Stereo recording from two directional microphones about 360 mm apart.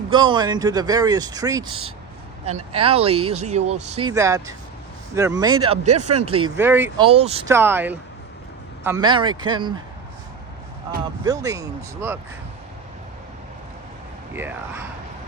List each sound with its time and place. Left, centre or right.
0.1 s speech: centre
6.4 s speech: centre
11.2 s speech: centre
14.3 s speech: centre